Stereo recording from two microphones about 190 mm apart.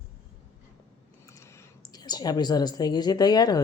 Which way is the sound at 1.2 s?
15° left (ahead or behind).